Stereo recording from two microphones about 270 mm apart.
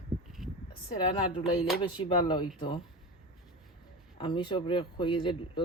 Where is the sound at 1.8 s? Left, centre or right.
Centre.